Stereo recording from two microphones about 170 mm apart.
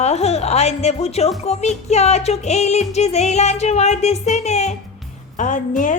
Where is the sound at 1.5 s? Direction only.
40° left (ahead or behind).